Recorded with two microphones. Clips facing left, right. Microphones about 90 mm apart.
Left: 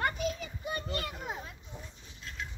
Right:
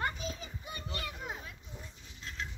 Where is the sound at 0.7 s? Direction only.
45° left (ahead or behind).